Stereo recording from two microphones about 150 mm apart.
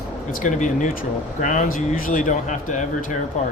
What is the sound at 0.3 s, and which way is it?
Speech, 65° left (ahead or behind).